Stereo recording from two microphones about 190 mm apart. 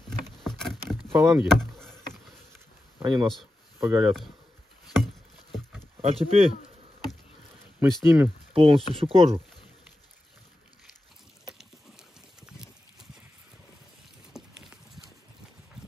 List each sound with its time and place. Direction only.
0.4 s vehicle: centre (ahead or behind)
1.4 s speech: centre (ahead or behind)
3.0 s speech: 20° right (ahead or behind)
4.8 s chopping: centre (ahead or behind)
5.9 s speech: 30° right (ahead or behind)
8.0 s speech: 10° right (ahead or behind)
8.5 s speech: 30° right (ahead or behind)
11.4 s a sound: centre (ahead or behind)
14.3 s a sound: 5° right (ahead or behind)